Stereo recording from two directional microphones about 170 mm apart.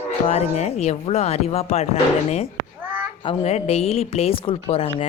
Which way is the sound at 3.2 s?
40° left (ahead or behind).